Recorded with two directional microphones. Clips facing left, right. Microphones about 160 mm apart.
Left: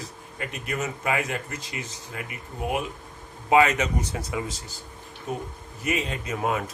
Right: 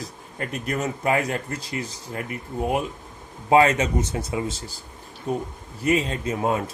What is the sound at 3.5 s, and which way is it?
Speech, 35° right (ahead or behind).